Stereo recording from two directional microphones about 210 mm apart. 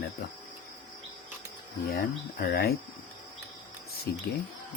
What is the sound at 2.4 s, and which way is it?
Speech, 45° left (ahead or behind).